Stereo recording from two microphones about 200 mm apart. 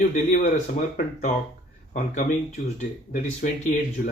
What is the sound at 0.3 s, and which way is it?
Speech, 35° left (ahead or behind).